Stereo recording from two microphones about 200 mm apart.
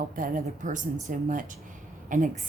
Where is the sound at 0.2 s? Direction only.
40° right (ahead or behind).